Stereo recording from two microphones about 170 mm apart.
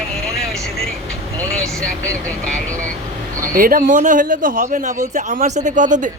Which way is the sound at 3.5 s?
55° right (ahead or behind).